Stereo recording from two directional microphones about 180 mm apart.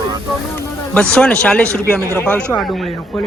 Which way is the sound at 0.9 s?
5° left (ahead or behind).